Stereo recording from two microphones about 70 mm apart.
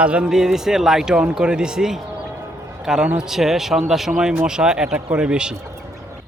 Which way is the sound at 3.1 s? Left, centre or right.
Centre.